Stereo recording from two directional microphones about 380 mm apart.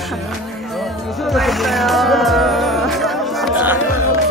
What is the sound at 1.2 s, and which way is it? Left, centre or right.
Music, centre.